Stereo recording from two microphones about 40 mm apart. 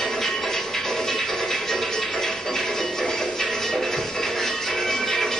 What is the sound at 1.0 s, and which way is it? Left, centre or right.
Music, centre.